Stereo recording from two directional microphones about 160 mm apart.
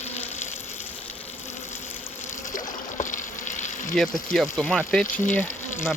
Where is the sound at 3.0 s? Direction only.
55° left (ahead or behind).